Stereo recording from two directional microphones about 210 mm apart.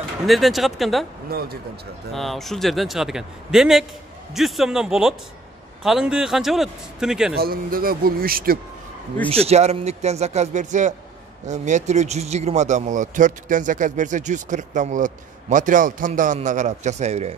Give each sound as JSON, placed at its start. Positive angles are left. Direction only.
{"t": 0.3, "sound": "a man's voice", "side_deg": 0}
{"t": 1.3, "sound": "speech", "side_deg": -45}
{"t": 2.1, "sound": "a man's voice", "side_deg": 0}
{"t": 7.3, "sound": "speech", "side_deg": -45}
{"t": 9.3, "sound": "speech", "side_deg": -30}